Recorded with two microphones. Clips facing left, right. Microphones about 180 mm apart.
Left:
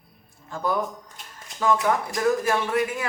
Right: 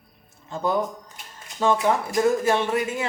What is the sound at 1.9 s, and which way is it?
Speech, 25° right (ahead or behind).